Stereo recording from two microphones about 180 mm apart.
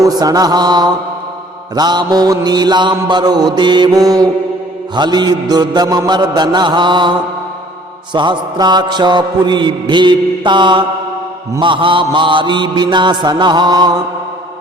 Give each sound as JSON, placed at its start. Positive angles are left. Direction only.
{"t": 0.0, "sound": "mantra", "side_deg": -20}